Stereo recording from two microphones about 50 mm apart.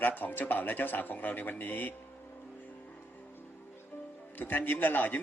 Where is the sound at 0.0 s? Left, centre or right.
Left.